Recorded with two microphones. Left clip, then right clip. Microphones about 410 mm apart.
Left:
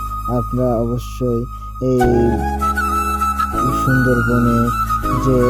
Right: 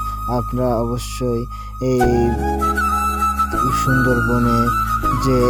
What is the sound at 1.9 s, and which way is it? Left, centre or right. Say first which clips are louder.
Flute: left 2 dB; centre.